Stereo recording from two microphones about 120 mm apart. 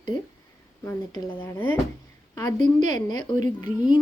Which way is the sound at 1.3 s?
15° left (ahead or behind).